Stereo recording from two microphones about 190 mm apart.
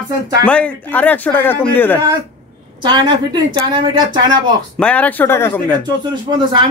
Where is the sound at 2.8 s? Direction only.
25° right (ahead or behind).